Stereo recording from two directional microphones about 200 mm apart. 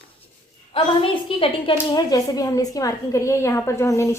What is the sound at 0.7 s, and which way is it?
A woman's voice, 25° left (ahead or behind).